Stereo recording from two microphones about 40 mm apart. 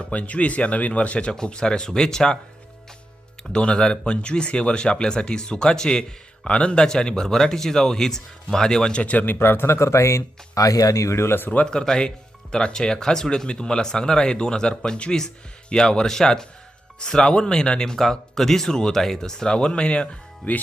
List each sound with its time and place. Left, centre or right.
0.0 s speech: left
1.3 s speech: centre
3.5 s speech: left
9.0 s speech: left
9.4 s speech: left
11.2 s speech: left
11.6 s speech: centre
19.5 s speech: left